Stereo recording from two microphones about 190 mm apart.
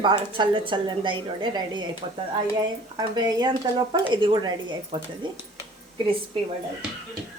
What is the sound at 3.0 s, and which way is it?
Speech, 20° right (ahead or behind).